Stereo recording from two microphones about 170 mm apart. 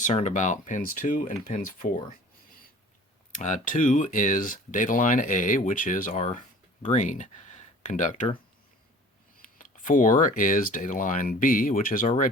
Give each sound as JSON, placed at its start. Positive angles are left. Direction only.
{"t": 0.0, "sound": "speech", "side_deg": 45}
{"t": 3.3, "sound": "speech", "side_deg": 45}
{"t": 9.6, "sound": "speech", "side_deg": 50}